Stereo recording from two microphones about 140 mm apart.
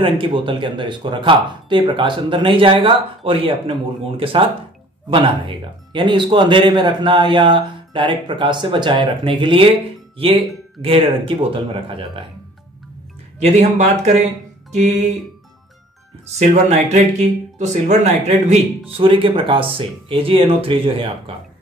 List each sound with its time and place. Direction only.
0.0 s speech: 35° right (ahead or behind)
13.4 s speech: 55° right (ahead or behind)
16.3 s speech: 55° right (ahead or behind); by 21.1 s 40° right (ahead or behind)